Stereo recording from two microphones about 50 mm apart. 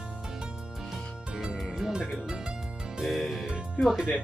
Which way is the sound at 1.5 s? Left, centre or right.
Centre.